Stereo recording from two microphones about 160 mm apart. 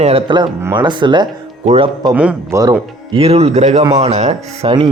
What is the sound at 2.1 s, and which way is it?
Speech, 10° right (ahead or behind).